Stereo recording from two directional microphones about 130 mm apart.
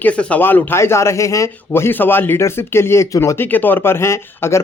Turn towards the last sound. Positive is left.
turn(degrees=20)  # may be behind; listen again after turning